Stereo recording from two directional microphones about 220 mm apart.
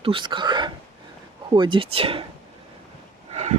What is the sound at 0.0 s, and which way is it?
Speech, 20° right (ahead or behind).